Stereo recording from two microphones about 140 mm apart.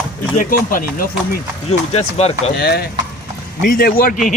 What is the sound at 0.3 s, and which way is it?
Speech, 85° left.